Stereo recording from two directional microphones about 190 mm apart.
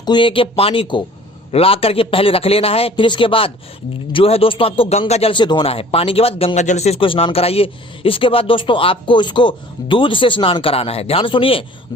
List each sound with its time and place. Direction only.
0.0 s a man's voice: 25° left (ahead or behind)